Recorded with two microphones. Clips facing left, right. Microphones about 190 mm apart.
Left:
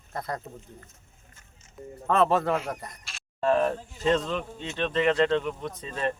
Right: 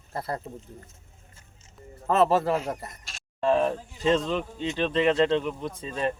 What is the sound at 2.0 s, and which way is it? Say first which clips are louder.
Speech: right 1 dB; 5° right (ahead or behind).